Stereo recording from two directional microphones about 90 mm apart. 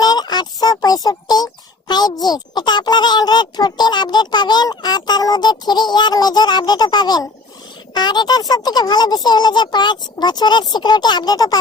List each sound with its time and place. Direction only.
0.0 s speech: 50° left (ahead or behind)